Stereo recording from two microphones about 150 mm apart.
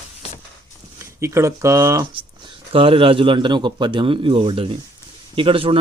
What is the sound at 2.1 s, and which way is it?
A man's voice, 35° right (ahead or behind).